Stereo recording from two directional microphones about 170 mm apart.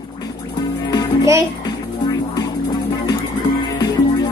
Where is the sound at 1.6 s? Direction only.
20° left (ahead or behind).